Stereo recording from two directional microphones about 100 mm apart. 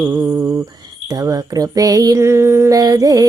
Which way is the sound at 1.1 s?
40° right (ahead or behind).